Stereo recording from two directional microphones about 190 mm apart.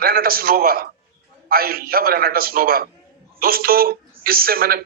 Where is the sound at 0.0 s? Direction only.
50° right (ahead or behind).